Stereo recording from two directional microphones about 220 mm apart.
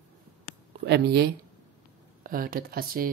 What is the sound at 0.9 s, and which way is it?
Speech, 45° right (ahead or behind).